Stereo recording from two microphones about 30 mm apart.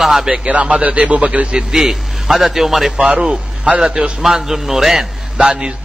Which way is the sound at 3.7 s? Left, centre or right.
Right.